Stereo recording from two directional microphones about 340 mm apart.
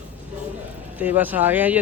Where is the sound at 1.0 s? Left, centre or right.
Centre.